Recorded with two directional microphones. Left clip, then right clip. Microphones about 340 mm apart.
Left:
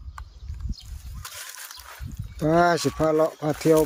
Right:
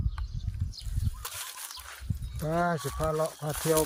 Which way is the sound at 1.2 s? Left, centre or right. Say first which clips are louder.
Left 2 dB; centre.